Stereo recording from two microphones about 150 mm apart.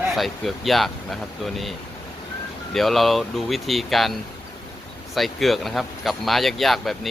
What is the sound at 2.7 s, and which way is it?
Speech, centre (ahead or behind).